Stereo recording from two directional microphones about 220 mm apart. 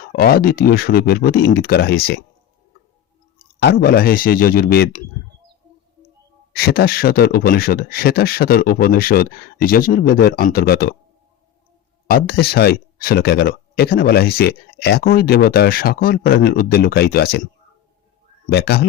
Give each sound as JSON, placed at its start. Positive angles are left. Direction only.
{"t": 0.1, "sound": "speech", "side_deg": 40}
{"t": 3.6, "sound": "speech", "side_deg": 45}
{"t": 6.5, "sound": "speech", "side_deg": 45}
{"t": 12.0, "sound": "speech", "side_deg": 45}
{"t": 18.4, "sound": "speech", "side_deg": 45}